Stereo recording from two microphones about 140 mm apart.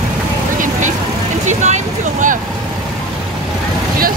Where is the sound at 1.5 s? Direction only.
60° right (ahead or behind).